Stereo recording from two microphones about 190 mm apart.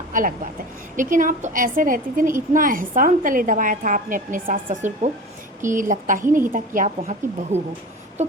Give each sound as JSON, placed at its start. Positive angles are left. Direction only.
{"t": 0.1, "sound": "a woman's voice", "side_deg": -45}